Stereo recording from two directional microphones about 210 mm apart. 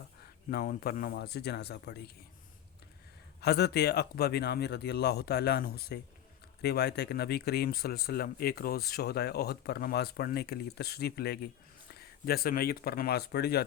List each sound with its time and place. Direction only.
0.5 s speech: 45° left (ahead or behind)
3.4 s speech: 50° left (ahead or behind)